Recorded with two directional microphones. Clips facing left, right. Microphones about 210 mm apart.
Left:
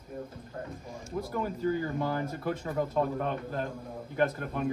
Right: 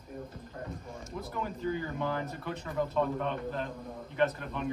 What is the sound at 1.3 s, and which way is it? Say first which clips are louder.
Speech: left 4 dB; 40° left (ahead or behind).